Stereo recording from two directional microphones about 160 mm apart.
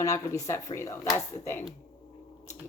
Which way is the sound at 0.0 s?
20° left (ahead or behind).